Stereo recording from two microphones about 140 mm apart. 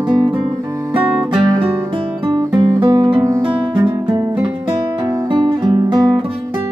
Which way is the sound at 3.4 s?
30° right (ahead or behind).